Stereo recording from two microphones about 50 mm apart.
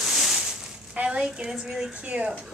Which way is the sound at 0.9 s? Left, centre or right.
Right.